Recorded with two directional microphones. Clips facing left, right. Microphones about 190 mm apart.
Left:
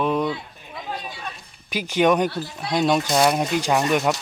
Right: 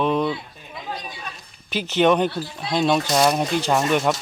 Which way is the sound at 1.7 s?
10° left (ahead or behind).